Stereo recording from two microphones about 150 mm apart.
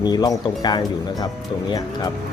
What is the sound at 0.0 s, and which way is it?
Speech, 25° left (ahead or behind).